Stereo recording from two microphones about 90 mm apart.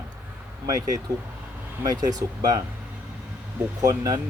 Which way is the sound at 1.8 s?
45° right (ahead or behind).